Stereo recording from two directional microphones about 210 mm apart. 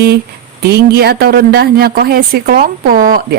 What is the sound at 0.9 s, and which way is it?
A woman's voice, 50° right (ahead or behind).